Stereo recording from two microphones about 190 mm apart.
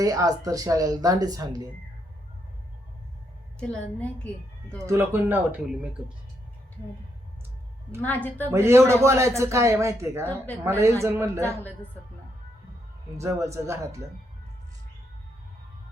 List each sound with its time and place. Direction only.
0.0 s speech: 20° right (ahead or behind)
3.6 s a woman's voice: 5° left (ahead or behind)
4.9 s a man's voice: 10° right (ahead or behind)
8.0 s a woman's voice: 10° left (ahead or behind)
8.4 s a man's voice: 15° right (ahead or behind)
10.2 s a woman's voice: 10° left (ahead or behind)
10.6 s a man's voice: 15° right (ahead or behind)
13.1 s a man's voice: 15° right (ahead or behind)